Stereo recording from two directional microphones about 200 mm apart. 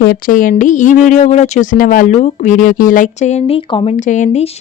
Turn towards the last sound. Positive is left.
turn(degrees=35)  # may be behind; listen again after turning